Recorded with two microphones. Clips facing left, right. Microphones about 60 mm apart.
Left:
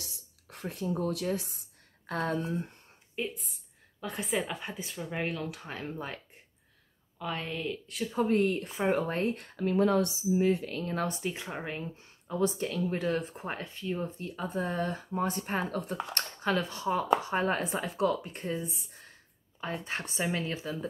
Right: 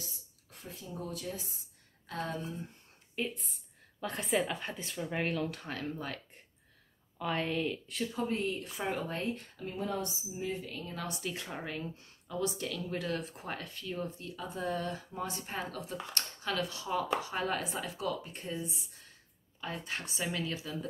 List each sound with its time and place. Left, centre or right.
0.0 s speech: left
3.2 s speech: centre; by 6.2 s left
7.2 s speech: centre
8.3 s speech: left
8.6 s speech: left
11.1 s speech: left
17.9 s speech: left
19.6 s speech: left